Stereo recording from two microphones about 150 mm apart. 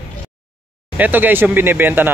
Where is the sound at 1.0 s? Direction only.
10° right (ahead or behind).